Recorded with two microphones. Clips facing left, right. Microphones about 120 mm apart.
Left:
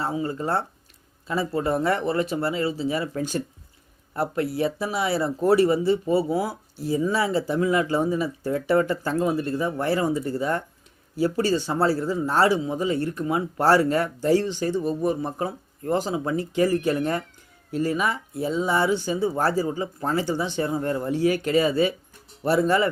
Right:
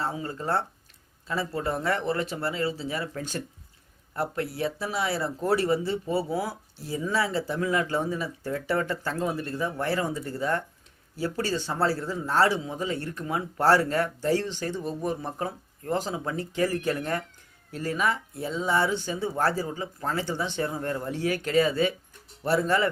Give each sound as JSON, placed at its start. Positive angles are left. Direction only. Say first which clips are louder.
{"t": 0.0, "sound": "speech", "louder": "left 4 dB", "side_deg": 15}